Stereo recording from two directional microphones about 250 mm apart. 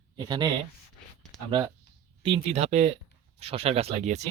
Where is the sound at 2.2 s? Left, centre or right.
Right.